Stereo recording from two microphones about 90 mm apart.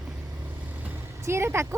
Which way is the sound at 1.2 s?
30° right (ahead or behind).